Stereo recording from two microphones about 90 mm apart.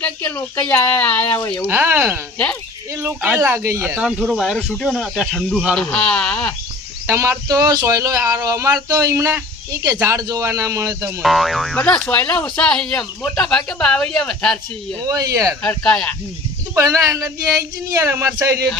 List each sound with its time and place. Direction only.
0.0 s speech: 20° left (ahead or behind)
1.6 s speech: 25° right (ahead or behind)
3.9 s speech: 10° right (ahead or behind)
5.8 s speech: 10° left (ahead or behind)
7.1 s speech: 30° right (ahead or behind)
11.2 s speech: centre (ahead or behind)
12.0 s speech: 15° left (ahead or behind)
15.0 s speech: 40° right (ahead or behind)
15.8 s speech: 5° left (ahead or behind)
16.7 s speech: 40° right (ahead or behind)